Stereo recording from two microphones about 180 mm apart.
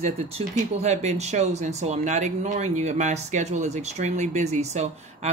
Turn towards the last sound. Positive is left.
turn(degrees=-40)  # may be behind; listen again after turning